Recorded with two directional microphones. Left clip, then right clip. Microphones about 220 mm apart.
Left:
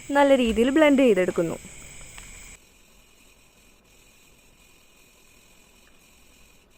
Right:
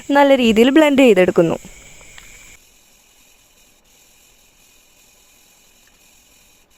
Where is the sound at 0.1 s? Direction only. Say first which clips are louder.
Right 7 dB; 40° right (ahead or behind).